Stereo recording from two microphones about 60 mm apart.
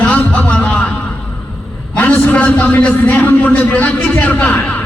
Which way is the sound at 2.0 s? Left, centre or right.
Left.